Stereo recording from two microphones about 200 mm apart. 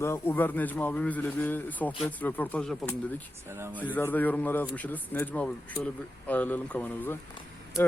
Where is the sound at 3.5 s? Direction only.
10° right (ahead or behind).